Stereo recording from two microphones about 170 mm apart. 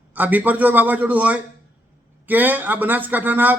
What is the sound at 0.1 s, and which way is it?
Speech, 10° right (ahead or behind).